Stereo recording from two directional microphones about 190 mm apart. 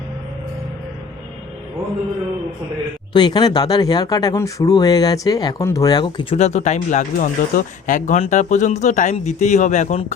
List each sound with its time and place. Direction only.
3.1 s speech: 20° left (ahead or behind)